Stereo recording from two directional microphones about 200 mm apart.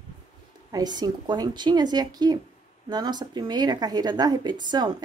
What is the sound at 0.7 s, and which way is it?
A woman's voice, 20° right (ahead or behind).